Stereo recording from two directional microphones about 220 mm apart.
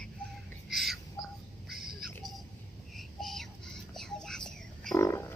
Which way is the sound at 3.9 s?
Centre (ahead or behind).